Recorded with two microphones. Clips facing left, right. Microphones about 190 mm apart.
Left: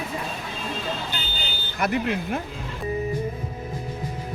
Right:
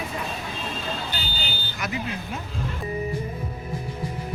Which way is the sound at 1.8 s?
60° left (ahead or behind).